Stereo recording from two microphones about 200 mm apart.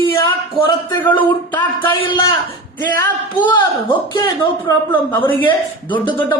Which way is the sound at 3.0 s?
10° left (ahead or behind).